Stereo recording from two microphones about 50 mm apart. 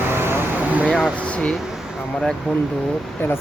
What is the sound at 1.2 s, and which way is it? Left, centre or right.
Speech, left.